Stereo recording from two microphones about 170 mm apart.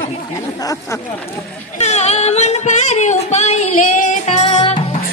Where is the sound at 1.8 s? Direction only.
40° left (ahead or behind).